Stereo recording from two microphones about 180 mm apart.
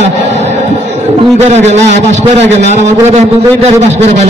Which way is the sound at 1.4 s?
40° right (ahead or behind).